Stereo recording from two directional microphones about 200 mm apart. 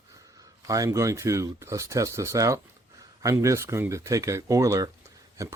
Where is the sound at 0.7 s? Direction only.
15° right (ahead or behind).